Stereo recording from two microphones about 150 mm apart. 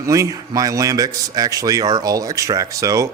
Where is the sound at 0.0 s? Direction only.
20° right (ahead or behind).